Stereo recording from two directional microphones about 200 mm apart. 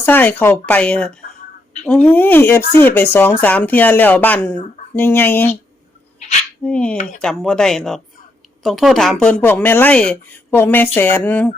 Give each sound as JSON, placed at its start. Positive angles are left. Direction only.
{"t": 0.0, "sound": "speech", "side_deg": 10}
{"t": 6.1, "sound": "a sound", "side_deg": 35}
{"t": 6.6, "sound": "speech", "side_deg": 5}
{"t": 6.9, "sound": "speech", "side_deg": 40}
{"t": 7.2, "sound": "speech", "side_deg": 5}